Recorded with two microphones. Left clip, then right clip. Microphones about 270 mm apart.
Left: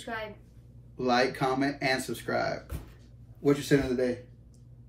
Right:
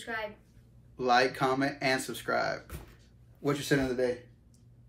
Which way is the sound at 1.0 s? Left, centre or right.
Centre.